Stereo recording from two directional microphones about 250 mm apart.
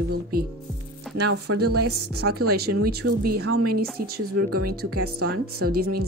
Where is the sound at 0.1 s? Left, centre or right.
Right.